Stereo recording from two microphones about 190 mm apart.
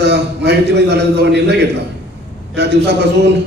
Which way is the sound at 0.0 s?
65° right (ahead or behind).